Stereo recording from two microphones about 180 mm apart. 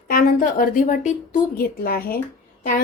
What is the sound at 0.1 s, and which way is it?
A woman's voice, 50° left (ahead or behind).